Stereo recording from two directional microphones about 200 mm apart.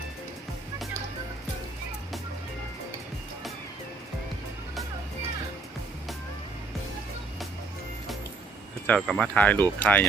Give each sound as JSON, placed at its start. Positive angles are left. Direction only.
{"t": 8.9, "sound": "speech", "side_deg": 0}